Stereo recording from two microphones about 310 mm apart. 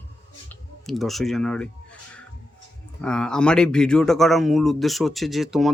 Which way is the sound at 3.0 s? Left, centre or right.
Centre.